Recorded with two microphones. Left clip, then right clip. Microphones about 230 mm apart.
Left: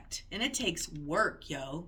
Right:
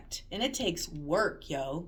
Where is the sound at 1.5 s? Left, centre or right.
Left.